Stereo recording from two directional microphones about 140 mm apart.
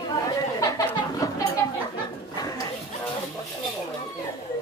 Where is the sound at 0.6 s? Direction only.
25° left (ahead or behind).